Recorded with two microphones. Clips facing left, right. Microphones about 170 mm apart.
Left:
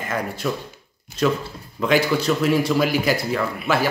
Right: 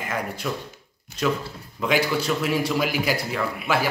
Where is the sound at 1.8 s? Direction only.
10° right (ahead or behind).